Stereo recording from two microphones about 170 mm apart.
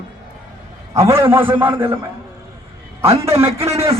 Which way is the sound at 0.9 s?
15° right (ahead or behind).